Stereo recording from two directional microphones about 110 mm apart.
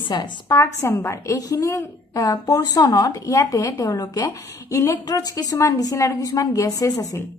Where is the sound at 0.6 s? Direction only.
25° left (ahead or behind).